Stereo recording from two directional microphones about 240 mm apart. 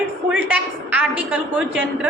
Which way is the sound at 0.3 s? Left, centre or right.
Centre.